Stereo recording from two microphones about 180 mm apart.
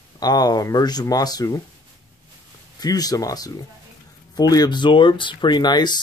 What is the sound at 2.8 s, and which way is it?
Speech, 20° left (ahead or behind).